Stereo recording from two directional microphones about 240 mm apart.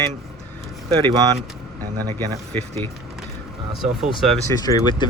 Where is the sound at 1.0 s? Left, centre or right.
Centre.